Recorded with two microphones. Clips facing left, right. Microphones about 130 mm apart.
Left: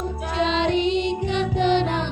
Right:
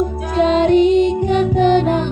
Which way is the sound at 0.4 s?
45° right (ahead or behind).